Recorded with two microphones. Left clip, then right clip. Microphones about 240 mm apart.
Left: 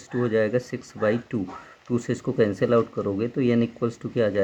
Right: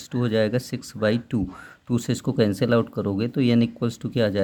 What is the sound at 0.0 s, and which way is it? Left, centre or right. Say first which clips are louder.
Speech: even; right.